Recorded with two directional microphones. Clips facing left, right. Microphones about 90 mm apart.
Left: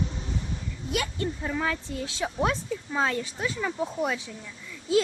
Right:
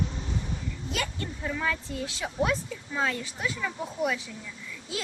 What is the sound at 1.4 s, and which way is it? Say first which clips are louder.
A woman's voice: right 2 dB; 30° left (ahead or behind).